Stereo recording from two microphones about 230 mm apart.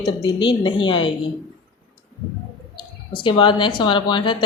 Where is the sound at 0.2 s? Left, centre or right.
Left.